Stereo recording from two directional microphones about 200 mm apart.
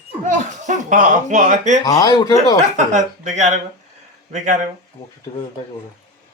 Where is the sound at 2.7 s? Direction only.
35° right (ahead or behind).